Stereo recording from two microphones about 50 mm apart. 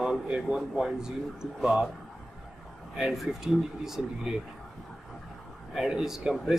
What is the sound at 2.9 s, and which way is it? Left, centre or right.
Speech, centre.